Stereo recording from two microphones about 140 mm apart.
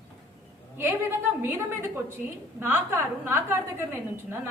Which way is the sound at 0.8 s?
15° right (ahead or behind).